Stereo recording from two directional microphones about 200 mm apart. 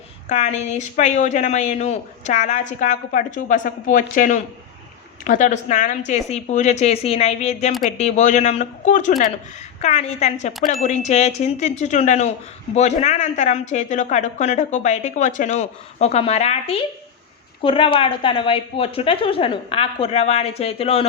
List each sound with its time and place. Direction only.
0.3 s a woman's voice: 35° left (ahead or behind)